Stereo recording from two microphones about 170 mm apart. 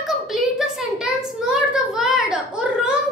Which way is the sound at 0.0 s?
Centre (ahead or behind).